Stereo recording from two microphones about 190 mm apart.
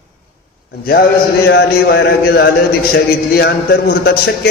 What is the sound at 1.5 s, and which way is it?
A man's voice, 60° left (ahead or behind).